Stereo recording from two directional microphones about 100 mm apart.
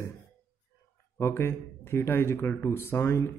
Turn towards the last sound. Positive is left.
turn(degrees=25)  # may be behind; listen again after turning